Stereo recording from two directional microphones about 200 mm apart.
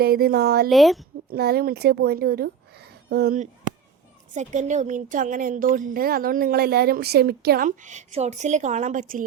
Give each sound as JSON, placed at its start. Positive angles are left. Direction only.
{"t": 0.0, "sound": "speech", "side_deg": -50}
{"t": 0.7, "sound": "speech", "side_deg": 0}
{"t": 1.3, "sound": "a woman's voice", "side_deg": -50}
{"t": 4.4, "sound": "speech", "side_deg": -35}